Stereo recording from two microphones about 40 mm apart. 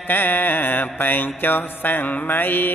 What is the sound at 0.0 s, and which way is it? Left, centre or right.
Music, left.